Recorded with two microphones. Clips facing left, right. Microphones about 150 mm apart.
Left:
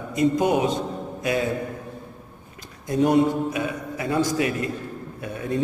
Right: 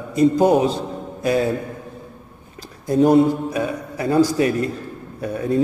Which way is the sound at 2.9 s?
35° right (ahead or behind).